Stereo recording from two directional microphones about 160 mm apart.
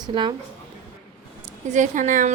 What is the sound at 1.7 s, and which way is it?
Speech, 50° right (ahead or behind).